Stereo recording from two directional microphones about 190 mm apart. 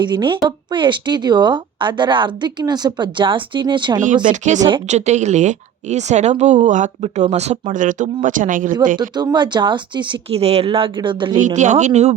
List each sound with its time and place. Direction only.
0.0 s speech: 25° right (ahead or behind)
4.0 s speech: 40° right (ahead or behind)
9.0 s speech: 20° right (ahead or behind)
11.3 s speech: 40° right (ahead or behind)